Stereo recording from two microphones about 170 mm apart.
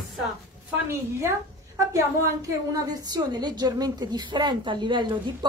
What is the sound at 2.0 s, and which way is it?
A woman's voice, 20° right (ahead or behind).